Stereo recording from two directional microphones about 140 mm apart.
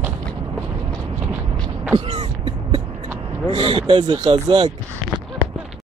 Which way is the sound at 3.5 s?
40° right (ahead or behind).